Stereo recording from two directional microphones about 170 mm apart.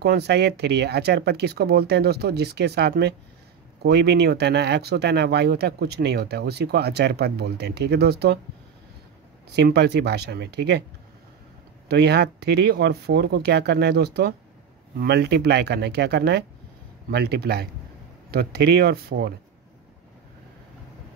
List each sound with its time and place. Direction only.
0.0 s speech: 70° right (ahead or behind)
9.6 s speech: 75° right (ahead or behind)
11.9 s speech: 75° right (ahead or behind)